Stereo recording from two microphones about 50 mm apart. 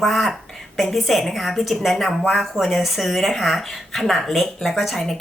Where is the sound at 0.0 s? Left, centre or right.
Centre.